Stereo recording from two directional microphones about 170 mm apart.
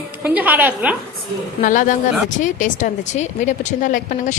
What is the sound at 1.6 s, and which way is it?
Speech, 50° left (ahead or behind).